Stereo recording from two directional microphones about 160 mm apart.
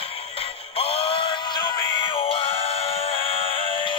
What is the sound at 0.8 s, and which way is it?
Synthetic singing, 35° left (ahead or behind).